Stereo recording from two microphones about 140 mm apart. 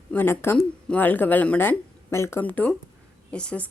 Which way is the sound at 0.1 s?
15° left (ahead or behind).